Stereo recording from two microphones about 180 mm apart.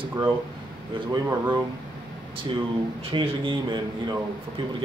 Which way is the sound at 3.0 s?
30° right (ahead or behind).